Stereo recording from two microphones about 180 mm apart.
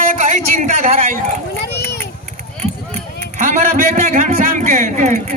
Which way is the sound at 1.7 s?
65° left (ahead or behind).